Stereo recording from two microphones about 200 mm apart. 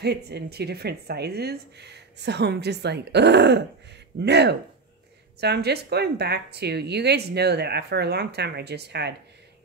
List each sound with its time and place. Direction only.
0.0 s a woman's voice: 55° right (ahead or behind)